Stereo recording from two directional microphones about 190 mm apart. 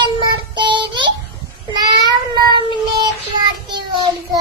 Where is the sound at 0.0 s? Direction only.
25° right (ahead or behind).